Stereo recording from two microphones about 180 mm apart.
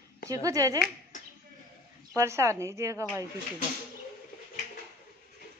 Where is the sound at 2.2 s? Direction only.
15° right (ahead or behind).